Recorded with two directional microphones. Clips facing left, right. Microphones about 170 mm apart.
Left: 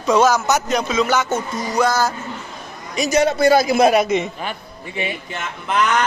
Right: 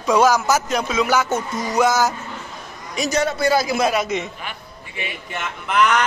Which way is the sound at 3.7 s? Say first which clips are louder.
Left 6 dB; 60° left (ahead or behind).